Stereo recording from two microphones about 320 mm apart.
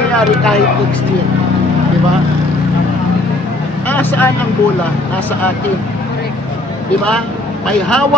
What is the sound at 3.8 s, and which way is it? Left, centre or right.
Speech, centre.